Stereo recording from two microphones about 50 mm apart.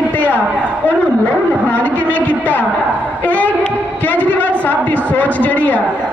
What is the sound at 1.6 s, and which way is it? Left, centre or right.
A man's voice, left.